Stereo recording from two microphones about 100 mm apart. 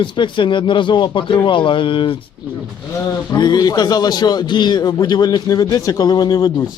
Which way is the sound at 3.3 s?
45° left (ahead or behind).